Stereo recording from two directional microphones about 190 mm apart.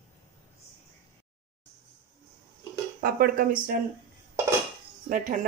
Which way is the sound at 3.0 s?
50° right (ahead or behind).